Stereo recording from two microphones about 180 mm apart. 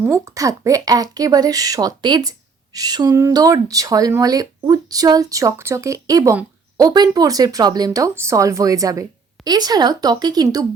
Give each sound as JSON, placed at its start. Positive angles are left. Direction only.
{"t": 0.0, "sound": "speech", "side_deg": -15}